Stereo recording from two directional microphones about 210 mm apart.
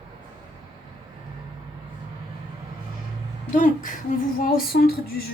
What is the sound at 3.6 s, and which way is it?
Speech, 40° left (ahead or behind).